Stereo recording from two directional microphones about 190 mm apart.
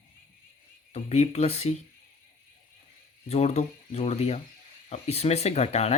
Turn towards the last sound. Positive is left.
turn(degrees=35)  # may be behind; listen again after turning